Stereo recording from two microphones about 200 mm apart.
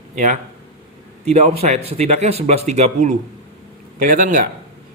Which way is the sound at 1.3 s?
35° right (ahead or behind).